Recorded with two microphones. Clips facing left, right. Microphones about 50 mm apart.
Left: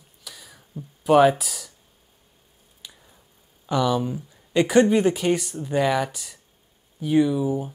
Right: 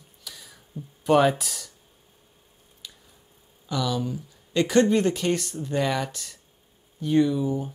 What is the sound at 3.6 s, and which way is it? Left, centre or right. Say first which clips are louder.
Speech: left 5 dB; left.